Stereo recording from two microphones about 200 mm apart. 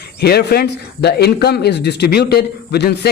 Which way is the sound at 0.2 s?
55° left (ahead or behind).